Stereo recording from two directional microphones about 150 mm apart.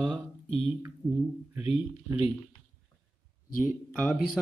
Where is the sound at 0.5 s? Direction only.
40° left (ahead or behind).